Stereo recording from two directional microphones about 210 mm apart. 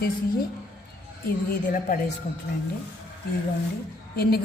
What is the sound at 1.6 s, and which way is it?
Speech, 40° left (ahead or behind).